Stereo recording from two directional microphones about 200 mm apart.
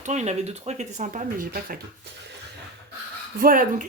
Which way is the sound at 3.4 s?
45° right (ahead or behind).